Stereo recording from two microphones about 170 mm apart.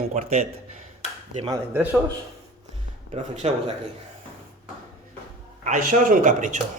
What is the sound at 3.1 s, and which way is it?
Speech, 40° right (ahead or behind).